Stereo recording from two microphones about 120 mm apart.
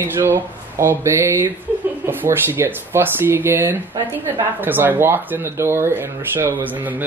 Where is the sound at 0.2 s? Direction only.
20° right (ahead or behind).